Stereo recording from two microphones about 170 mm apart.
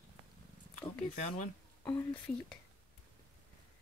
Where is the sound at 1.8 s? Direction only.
10° left (ahead or behind).